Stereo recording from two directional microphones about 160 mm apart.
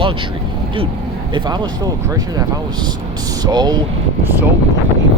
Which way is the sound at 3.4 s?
25° right (ahead or behind).